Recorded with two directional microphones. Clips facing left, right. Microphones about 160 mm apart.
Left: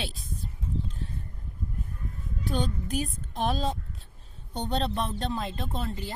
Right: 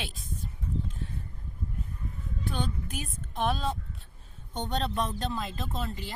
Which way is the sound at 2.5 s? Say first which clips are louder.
Left 4 dB; 40° left (ahead or behind).